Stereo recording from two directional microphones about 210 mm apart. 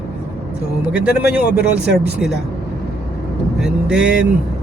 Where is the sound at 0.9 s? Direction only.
5° right (ahead or behind).